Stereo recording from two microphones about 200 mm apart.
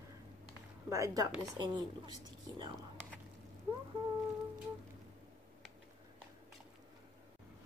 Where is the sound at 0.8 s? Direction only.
15° right (ahead or behind).